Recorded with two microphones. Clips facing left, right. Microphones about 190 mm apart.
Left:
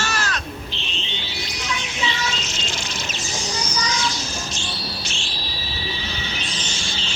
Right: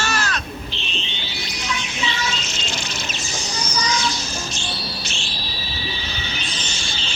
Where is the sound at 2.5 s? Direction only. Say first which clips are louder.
Right 1 dB; 65° right (ahead or behind).